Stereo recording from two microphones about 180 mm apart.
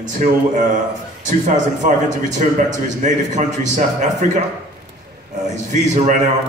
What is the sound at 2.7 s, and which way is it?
A man's voice, 40° right (ahead or behind).